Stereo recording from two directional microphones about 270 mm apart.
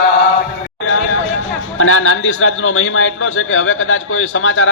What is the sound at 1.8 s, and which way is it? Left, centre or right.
A man's voice, left.